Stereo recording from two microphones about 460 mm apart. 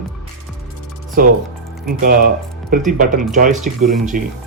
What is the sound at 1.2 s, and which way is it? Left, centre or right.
Speech, centre.